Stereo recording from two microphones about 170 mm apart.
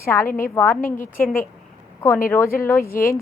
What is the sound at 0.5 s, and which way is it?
Speech, 10° left (ahead or behind).